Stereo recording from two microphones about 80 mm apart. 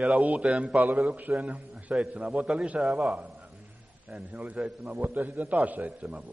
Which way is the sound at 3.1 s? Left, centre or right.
Centre.